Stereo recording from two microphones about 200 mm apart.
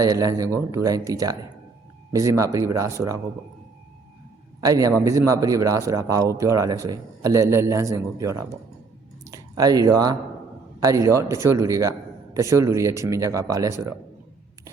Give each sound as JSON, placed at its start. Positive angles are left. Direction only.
{"t": 0.0, "sound": "a man's voice", "side_deg": -15}
{"t": 4.6, "sound": "a man's voice", "side_deg": -15}